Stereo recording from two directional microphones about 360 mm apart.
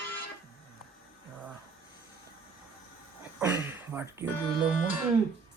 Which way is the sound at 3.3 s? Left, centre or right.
Centre.